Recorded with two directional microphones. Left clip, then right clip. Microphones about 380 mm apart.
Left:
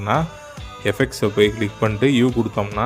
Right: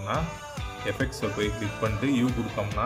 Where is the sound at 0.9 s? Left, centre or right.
Left.